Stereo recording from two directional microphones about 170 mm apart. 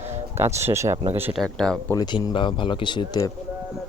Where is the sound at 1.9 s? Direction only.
25° left (ahead or behind).